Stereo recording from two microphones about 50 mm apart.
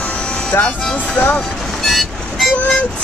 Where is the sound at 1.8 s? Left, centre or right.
Centre.